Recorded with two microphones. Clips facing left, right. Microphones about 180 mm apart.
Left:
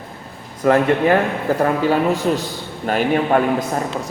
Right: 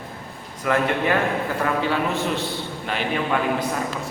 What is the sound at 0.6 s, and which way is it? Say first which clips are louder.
A man's voice: left 7 dB; 40° left (ahead or behind).